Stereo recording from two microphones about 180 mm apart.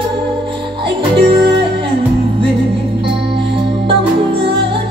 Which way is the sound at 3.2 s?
70° right (ahead or behind).